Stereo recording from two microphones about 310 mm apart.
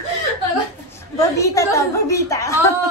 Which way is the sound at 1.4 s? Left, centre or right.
Centre.